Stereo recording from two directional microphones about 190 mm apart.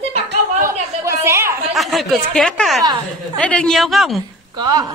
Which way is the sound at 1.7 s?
Centre (ahead or behind).